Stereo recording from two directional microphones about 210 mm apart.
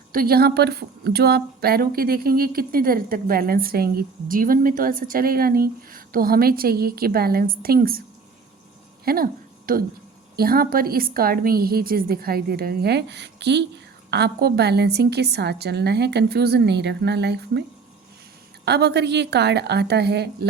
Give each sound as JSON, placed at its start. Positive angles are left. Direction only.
{"t": 0.1, "sound": "a woman's voice", "side_deg": -45}
{"t": 9.0, "sound": "a sound", "side_deg": -45}
{"t": 10.3, "sound": "a woman's voice", "side_deg": -45}
{"t": 18.6, "sound": "a woman's voice", "side_deg": -50}